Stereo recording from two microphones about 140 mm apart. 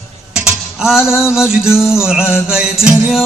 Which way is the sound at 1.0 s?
20° left (ahead or behind).